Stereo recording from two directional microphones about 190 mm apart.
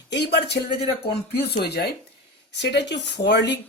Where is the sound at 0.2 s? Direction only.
60° left (ahead or behind).